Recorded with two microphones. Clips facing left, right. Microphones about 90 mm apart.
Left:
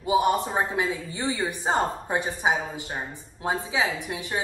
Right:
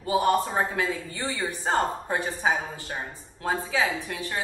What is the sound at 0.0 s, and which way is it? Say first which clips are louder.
A woman's voice: left 1 dB; 15° left (ahead or behind).